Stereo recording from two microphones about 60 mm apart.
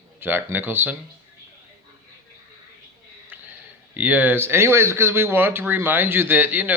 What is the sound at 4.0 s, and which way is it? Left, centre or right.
Speech, right.